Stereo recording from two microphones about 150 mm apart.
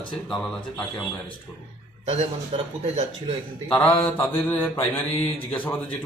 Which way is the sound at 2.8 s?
45° right (ahead or behind).